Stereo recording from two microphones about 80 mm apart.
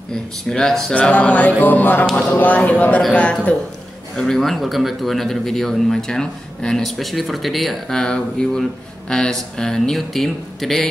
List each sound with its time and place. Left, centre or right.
0.1 s speech: centre
0.9 s music: centre
1.6 s speech: left
3.0 s music: centre
4.2 s speech: centre